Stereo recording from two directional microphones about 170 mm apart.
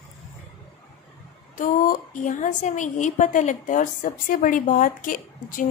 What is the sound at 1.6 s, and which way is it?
A woman's voice, 50° left (ahead or behind).